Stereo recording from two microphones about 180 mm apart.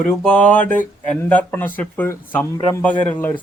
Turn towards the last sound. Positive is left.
turn(degrees=10)  # may be behind; listen again after turning